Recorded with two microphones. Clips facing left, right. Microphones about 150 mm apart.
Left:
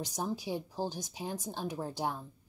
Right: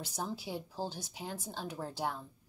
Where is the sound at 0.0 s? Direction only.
15° left (ahead or behind).